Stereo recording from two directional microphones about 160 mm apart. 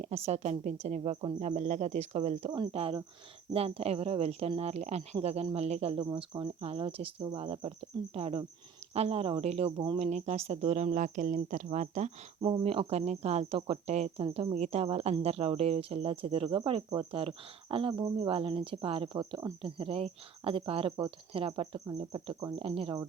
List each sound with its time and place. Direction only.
0.0 s a woman's voice: 45° right (ahead or behind)
10.0 s a woman's voice: 45° right (ahead or behind)
12.4 s speech: 30° right (ahead or behind)
17.2 s speech: 35° right (ahead or behind)